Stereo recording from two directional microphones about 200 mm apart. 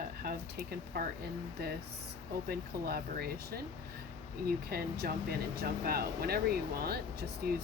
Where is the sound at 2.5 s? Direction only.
50° right (ahead or behind).